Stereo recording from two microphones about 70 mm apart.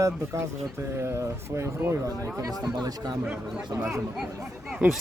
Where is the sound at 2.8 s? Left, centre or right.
Right.